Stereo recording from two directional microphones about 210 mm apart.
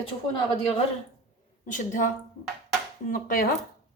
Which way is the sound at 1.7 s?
40° left (ahead or behind).